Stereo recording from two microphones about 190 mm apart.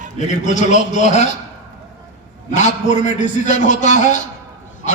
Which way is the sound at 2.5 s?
40° left (ahead or behind).